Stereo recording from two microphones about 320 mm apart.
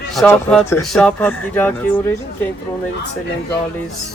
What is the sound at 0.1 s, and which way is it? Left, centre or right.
Speech, centre.